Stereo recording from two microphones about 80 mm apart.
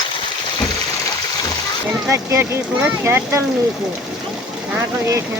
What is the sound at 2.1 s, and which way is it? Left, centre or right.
Speech, right.